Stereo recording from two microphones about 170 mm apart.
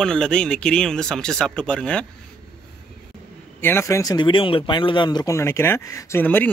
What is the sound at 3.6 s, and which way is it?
Speech, 15° left (ahead or behind).